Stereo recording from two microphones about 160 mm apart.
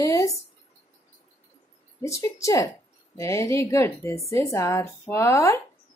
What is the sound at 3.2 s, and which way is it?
Female singing, 20° left (ahead or behind).